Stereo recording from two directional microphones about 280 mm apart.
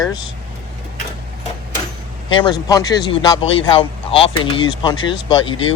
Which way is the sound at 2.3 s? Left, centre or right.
Centre.